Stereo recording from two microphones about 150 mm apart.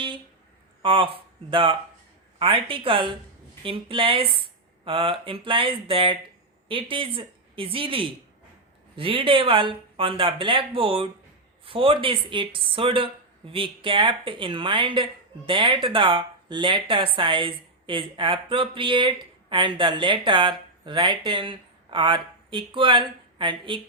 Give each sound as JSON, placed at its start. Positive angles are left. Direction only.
{"t": 0.8, "sound": "a woman's voice", "side_deg": -35}